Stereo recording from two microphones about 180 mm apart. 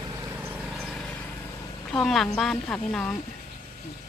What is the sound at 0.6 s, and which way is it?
Vehicle, centre (ahead or behind).